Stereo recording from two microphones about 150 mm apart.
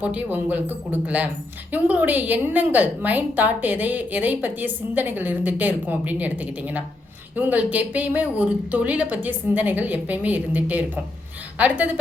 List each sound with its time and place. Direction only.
0.0 s a woman's voice: 10° right (ahead or behind)